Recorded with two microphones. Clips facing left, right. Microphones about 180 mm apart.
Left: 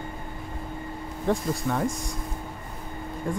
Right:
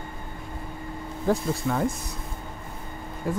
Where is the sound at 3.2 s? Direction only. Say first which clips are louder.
Right 2 dB; 5° right (ahead or behind).